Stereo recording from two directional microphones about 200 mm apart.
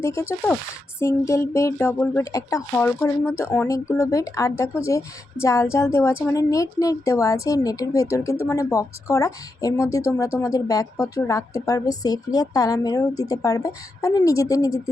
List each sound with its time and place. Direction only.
0.0 s a woman's voice: 15° left (ahead or behind)